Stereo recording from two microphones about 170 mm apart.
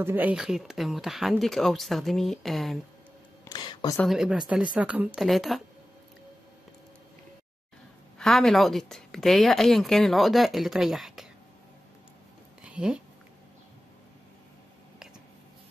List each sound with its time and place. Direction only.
0.0 s speech: 10° right (ahead or behind)
3.4 s a sound: 25° left (ahead or behind)
4.0 s speech: centre (ahead or behind)
8.2 s speech: centre (ahead or behind)
12.6 s speech: 5° right (ahead or behind)